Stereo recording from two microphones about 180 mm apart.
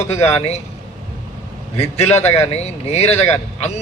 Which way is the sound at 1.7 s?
35° left (ahead or behind).